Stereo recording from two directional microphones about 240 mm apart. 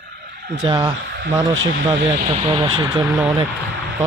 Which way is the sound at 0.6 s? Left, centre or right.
Centre.